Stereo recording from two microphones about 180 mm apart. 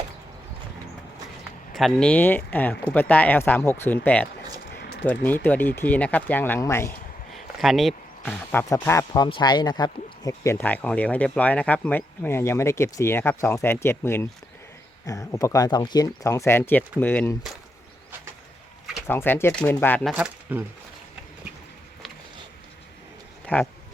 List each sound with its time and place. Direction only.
1.7 s speech: centre (ahead or behind)
4.7 s a sound: 65° left (ahead or behind)
5.2 s speech: 10° left (ahead or behind)
7.3 s speech: centre (ahead or behind)
19.0 s speech: 10° left (ahead or behind)
20.1 s speech: 5° right (ahead or behind)